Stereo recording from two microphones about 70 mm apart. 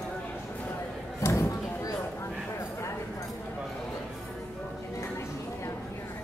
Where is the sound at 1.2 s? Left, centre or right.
Left.